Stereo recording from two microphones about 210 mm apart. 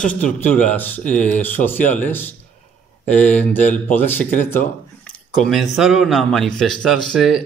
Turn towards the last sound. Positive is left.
turn(degrees=0)  # may be behind; listen again after turning